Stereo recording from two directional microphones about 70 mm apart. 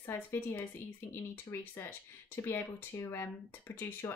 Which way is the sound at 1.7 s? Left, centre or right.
Left.